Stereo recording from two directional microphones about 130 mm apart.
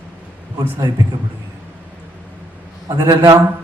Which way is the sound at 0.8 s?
30° right (ahead or behind).